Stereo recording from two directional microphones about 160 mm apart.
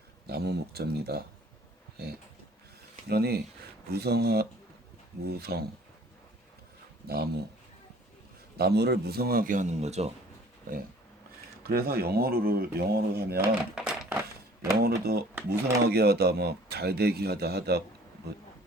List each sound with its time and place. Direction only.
0.3 s speech: 90° right
3.1 s speech: 80° right
7.1 s speech: 85° right
8.5 s speech: 90° right; by 10.1 s 45° right (ahead or behind)
11.6 s speech: 75° right (ahead or behind)
13.7 s a sound: 5° right (ahead or behind)
14.8 s speech: 80° right
15.4 s speech: 85° right